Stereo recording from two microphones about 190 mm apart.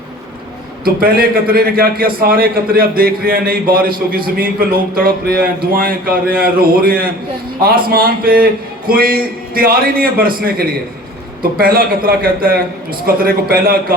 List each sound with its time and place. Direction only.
0.9 s a man's voice: 50° right (ahead or behind)